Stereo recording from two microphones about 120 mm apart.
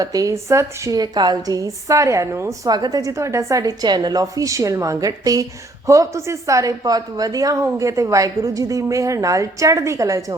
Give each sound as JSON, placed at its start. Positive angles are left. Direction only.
{"t": 0.0, "sound": "a woman's voice", "side_deg": -30}